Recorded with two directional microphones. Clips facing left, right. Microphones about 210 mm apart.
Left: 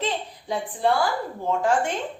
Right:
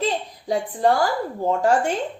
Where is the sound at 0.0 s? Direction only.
40° right (ahead or behind).